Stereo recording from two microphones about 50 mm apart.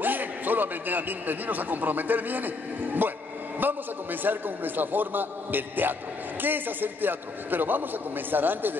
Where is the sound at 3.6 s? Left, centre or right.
Right.